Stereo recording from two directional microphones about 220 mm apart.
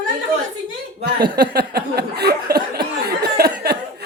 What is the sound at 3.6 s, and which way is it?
Laughter, 45° right (ahead or behind).